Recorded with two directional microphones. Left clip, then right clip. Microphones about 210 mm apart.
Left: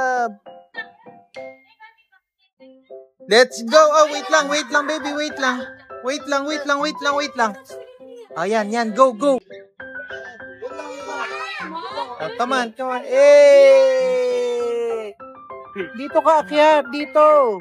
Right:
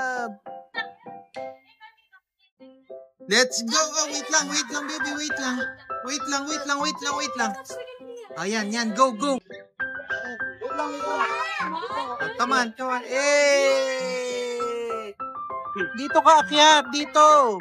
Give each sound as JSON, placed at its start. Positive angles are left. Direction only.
{"t": 0.0, "sound": "music", "side_deg": -5}
{"t": 3.3, "sound": "a man's voice", "side_deg": -5}
{"t": 10.6, "sound": "music", "side_deg": -35}
{"t": 11.7, "sound": "a sound", "side_deg": -5}
{"t": 16.0, "sound": "speech", "side_deg": -5}